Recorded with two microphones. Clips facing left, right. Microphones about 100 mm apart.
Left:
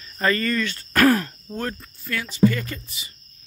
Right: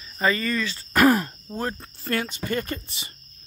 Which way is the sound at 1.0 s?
20° right (ahead or behind).